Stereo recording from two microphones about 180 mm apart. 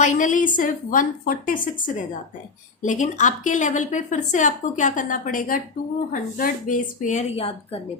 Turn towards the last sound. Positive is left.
turn(degrees=35)  # may be behind; listen again after turning